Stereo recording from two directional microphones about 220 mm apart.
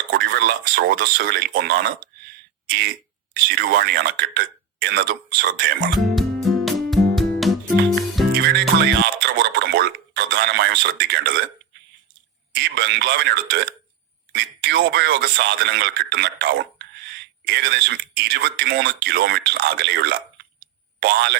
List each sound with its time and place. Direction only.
0.1 s speech: 45° right (ahead or behind)
3.3 s speech: 45° right (ahead or behind)
5.9 s music: centre (ahead or behind)
8.3 s music: 50° right (ahead or behind)
12.7 s speech: 50° right (ahead or behind)